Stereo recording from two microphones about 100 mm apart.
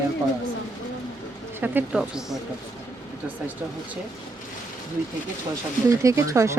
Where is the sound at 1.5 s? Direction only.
20° right (ahead or behind).